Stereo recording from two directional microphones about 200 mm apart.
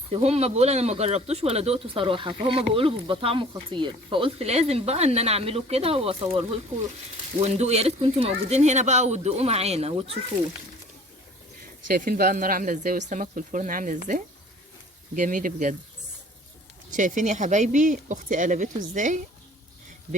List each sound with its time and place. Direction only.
0.1 s speech: 30° right (ahead or behind)
7.4 s speech: 35° right (ahead or behind)
11.9 s speech: 45° right (ahead or behind)
15.1 s speech: 40° right (ahead or behind)
16.9 s speech: 40° right (ahead or behind)